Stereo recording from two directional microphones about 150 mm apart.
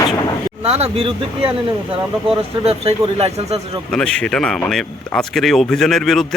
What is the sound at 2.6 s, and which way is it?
Speech, 40° right (ahead or behind).